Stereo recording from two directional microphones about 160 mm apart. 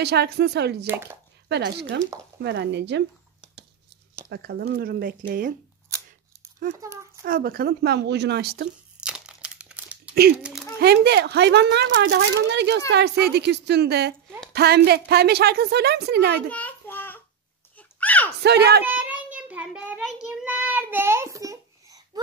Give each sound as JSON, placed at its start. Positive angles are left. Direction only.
{"t": 0.0, "sound": "speech", "side_deg": -90}
{"t": 0.8, "sound": "speech", "side_deg": -15}
{"t": 1.5, "sound": "speech", "side_deg": -90}
{"t": 4.3, "sound": "speech", "side_deg": -90}
{"t": 6.8, "sound": "speech", "side_deg": -20}
{"t": 7.2, "sound": "speech", "side_deg": -65}
{"t": 9.0, "sound": "crumpling", "side_deg": -5}
{"t": 10.4, "sound": "a sound", "side_deg": 0}
{"t": 10.8, "sound": "speech", "side_deg": -85}
{"t": 16.4, "sound": "a sound", "side_deg": 10}
{"t": 18.4, "sound": "speech", "side_deg": -90}
{"t": 18.9, "sound": "child singing", "side_deg": -10}